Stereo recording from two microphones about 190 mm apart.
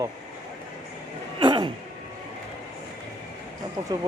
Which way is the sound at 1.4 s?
25° right (ahead or behind).